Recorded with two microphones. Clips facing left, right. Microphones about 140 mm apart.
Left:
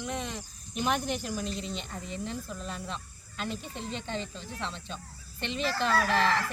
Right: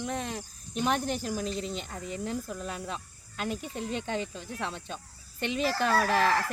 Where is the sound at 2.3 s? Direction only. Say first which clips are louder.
Right 3 dB; 50° right (ahead or behind).